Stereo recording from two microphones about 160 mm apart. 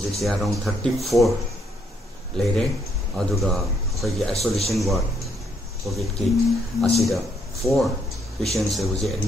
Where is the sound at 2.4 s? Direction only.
5° left (ahead or behind).